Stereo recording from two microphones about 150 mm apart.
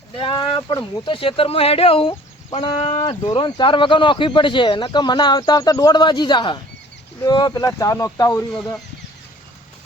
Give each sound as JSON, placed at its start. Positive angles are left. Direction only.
{"t": 0.2, "sound": "speech", "side_deg": 35}
{"t": 2.9, "sound": "speech", "side_deg": 30}